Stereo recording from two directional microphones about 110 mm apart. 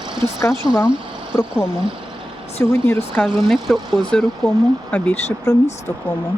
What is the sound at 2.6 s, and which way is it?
Speech, 20° left (ahead or behind).